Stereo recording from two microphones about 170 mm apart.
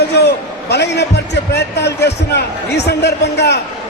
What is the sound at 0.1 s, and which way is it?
A man's voice, 80° left.